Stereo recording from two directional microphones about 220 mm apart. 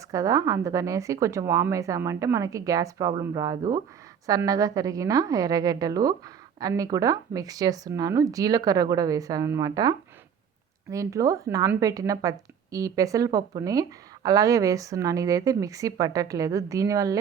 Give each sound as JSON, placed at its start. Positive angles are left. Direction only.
{"t": 0.1, "sound": "a woman's voice", "side_deg": -15}